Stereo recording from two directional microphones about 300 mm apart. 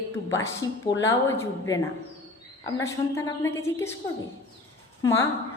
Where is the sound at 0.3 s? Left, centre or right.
Centre.